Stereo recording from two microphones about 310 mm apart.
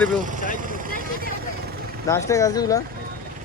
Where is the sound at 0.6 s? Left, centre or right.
Right.